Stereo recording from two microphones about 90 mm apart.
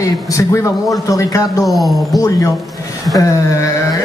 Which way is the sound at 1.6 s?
Centre (ahead or behind).